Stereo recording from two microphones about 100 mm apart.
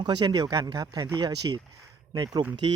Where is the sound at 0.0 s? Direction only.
50° right (ahead or behind).